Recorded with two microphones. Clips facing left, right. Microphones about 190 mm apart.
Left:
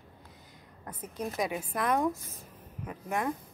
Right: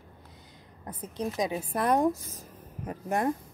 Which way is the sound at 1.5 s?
35° right (ahead or behind).